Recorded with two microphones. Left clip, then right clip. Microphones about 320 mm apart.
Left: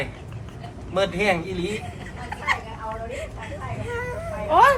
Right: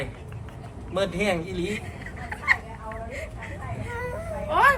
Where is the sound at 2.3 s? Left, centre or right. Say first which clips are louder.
Right 1 dB; centre.